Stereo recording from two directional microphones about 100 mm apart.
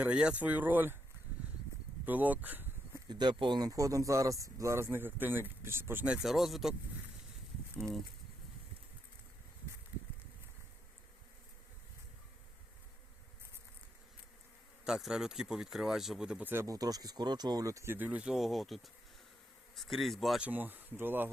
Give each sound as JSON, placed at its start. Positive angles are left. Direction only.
{"t": 0.0, "sound": "speech", "side_deg": -10}
{"t": 2.0, "sound": "a sound", "side_deg": -15}
{"t": 3.1, "sound": "speech", "side_deg": -50}
{"t": 3.7, "sound": "speech", "side_deg": -35}
{"t": 6.1, "sound": "speech", "side_deg": 0}
{"t": 7.8, "sound": "speech", "side_deg": 0}
{"t": 14.8, "sound": "speech", "side_deg": -5}
{"t": 16.4, "sound": "speech", "side_deg": -20}
{"t": 16.6, "sound": "speech", "side_deg": -40}
{"t": 17.9, "sound": "speech", "side_deg": -15}
{"t": 20.4, "sound": "speech", "side_deg": -15}